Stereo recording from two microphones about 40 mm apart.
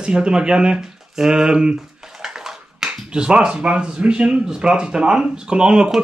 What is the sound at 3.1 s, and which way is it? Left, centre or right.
Speech, right.